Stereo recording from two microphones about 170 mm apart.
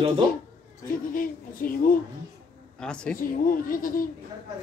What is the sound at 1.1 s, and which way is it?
Speech, 55° left (ahead or behind).